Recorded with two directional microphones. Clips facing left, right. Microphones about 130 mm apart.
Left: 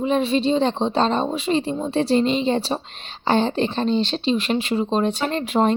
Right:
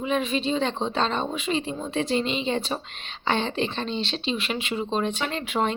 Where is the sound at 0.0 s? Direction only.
35° left (ahead or behind).